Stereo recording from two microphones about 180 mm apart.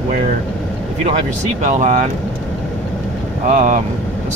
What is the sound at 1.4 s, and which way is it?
Speech, 40° right (ahead or behind).